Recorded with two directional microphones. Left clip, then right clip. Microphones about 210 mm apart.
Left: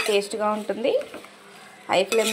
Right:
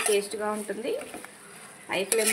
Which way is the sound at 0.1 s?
15° left (ahead or behind).